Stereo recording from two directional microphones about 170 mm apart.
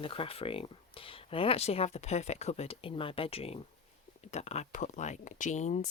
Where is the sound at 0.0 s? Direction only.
30° left (ahead or behind).